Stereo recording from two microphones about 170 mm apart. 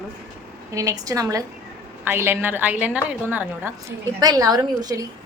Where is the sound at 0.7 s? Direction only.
20° right (ahead or behind).